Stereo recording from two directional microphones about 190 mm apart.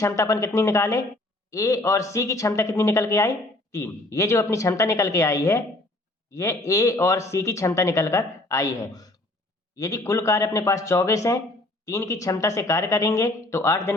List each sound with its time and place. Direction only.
0.0 s speech: 15° left (ahead or behind)